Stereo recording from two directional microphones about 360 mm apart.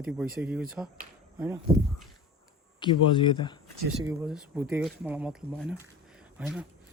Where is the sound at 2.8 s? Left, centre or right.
Centre.